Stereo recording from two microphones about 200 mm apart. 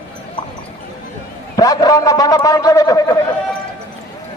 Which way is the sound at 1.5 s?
20° left (ahead or behind).